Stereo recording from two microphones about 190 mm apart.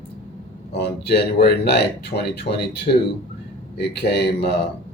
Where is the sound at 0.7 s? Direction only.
60° left (ahead or behind).